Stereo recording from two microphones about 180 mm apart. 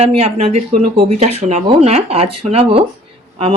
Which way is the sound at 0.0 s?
35° right (ahead or behind).